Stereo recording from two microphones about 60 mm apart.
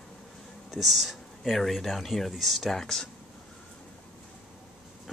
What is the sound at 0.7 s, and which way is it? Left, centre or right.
Speech, centre.